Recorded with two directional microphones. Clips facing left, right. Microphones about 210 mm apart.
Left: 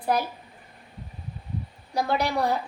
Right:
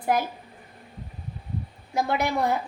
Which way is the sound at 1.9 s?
20° right (ahead or behind).